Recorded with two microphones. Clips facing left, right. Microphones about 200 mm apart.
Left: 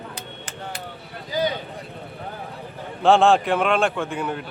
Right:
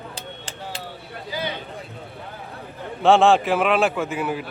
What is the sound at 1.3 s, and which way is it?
Speech, 40° left (ahead or behind).